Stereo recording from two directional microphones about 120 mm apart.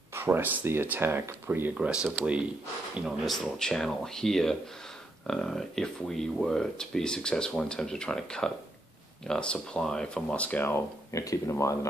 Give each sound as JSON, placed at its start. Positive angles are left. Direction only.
{"t": 0.1, "sound": "speech", "side_deg": -20}
{"t": 3.1, "sound": "speech", "side_deg": 0}